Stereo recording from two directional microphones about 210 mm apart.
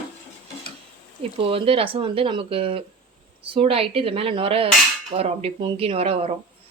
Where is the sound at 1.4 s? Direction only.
25° right (ahead or behind).